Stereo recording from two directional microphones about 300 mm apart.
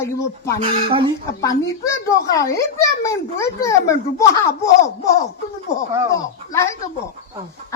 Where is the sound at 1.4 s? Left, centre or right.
Centre.